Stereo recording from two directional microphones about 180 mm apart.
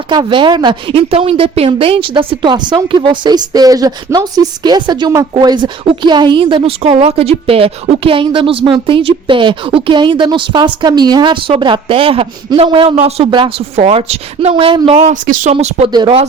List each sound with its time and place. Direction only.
0.1 s speech: 25° right (ahead or behind); by 15.5 s 45° right (ahead or behind)
15.5 s speech: 30° right (ahead or behind)